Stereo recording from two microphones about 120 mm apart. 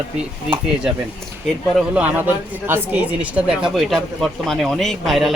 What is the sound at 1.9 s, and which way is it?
A woman's voice, 15° right (ahead or behind).